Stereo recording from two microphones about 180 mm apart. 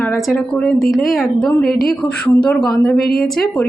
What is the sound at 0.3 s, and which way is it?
A woman's voice, centre (ahead or behind).